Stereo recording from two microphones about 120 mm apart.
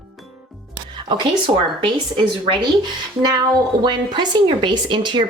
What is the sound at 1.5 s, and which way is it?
A woman's voice, 45° right (ahead or behind).